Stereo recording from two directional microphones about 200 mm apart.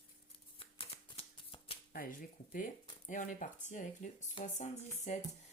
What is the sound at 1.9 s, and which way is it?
Speech, 45° left (ahead or behind).